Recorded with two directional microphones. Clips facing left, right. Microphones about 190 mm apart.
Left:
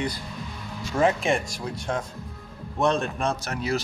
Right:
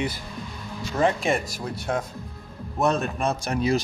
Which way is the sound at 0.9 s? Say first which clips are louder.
Even; centre (ahead or behind).